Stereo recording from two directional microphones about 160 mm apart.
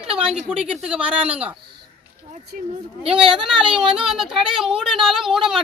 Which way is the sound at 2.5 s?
60° right (ahead or behind).